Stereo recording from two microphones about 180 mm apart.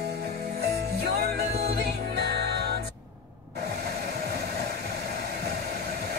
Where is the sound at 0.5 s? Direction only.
65° right (ahead or behind).